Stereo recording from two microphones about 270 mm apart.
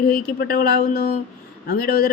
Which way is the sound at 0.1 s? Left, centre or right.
Left.